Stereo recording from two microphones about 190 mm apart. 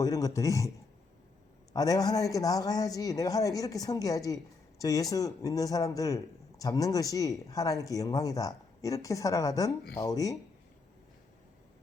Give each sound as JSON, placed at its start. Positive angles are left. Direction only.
{"t": 0.0, "sound": "speech", "side_deg": 20}
{"t": 1.7, "sound": "a man's voice", "side_deg": 20}